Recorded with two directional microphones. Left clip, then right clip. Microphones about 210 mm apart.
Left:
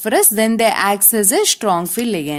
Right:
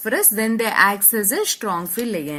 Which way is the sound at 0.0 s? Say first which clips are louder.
Left 6 dB; 50° left (ahead or behind).